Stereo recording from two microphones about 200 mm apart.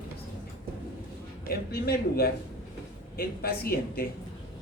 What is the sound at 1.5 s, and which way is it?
Speech, 50° left (ahead or behind).